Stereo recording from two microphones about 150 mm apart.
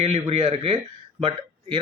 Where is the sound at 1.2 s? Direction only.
40° right (ahead or behind).